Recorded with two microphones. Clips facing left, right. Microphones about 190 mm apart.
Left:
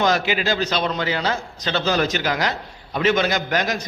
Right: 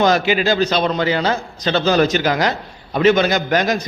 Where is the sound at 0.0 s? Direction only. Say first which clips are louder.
Right 5 dB; 35° right (ahead or behind).